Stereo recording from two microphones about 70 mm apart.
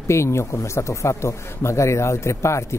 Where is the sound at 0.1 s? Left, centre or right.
Left.